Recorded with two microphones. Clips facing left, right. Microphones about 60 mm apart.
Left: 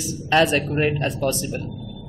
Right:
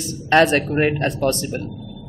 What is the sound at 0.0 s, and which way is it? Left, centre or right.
A man's voice, right.